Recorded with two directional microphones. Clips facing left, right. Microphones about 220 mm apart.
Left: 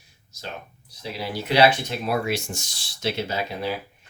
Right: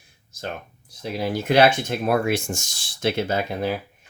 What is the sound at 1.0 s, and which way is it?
Speech, 50° right (ahead or behind).